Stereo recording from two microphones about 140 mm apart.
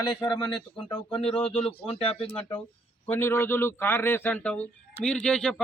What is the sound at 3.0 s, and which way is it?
A man's voice, 15° left (ahead or behind).